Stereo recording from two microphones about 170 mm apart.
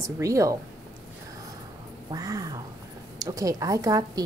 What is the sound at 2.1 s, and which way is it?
Cat, 20° right (ahead or behind).